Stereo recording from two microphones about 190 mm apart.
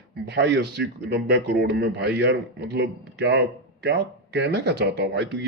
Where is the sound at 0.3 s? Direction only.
65° right (ahead or behind).